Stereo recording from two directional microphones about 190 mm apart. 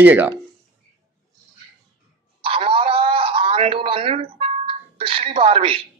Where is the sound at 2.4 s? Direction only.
30° right (ahead or behind).